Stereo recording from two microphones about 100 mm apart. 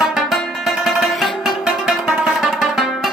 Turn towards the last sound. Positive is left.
turn(degrees=-5)  # may be behind; listen again after turning